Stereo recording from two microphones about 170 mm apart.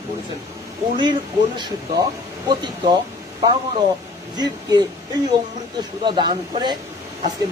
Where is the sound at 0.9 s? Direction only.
25° right (ahead or behind).